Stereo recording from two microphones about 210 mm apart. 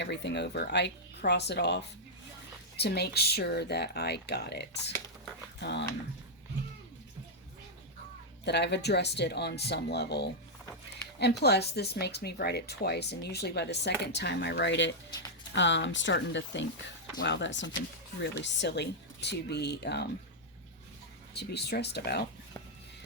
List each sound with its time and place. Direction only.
0.0 s speech: 55° left (ahead or behind)
8.4 s speech: 55° left (ahead or behind)
21.3 s speech: 50° left (ahead or behind)